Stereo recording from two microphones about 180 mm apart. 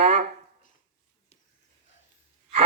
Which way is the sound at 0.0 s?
40° right (ahead or behind).